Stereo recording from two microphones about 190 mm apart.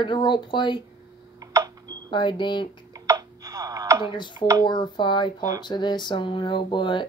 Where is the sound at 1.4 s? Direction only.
20° right (ahead or behind).